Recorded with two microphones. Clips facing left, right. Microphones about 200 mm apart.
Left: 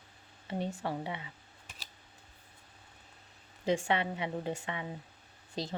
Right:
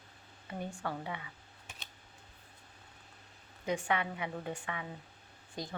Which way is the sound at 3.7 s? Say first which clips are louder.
Left 3 dB; 25° left (ahead or behind).